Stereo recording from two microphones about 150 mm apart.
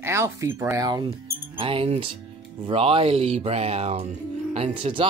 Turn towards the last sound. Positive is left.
turn(degrees=-35)  # may be behind; listen again after turning